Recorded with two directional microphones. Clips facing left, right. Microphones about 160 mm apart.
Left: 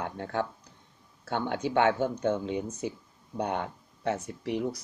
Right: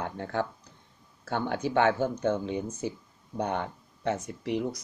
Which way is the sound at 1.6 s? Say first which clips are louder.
Even; 40° right (ahead or behind).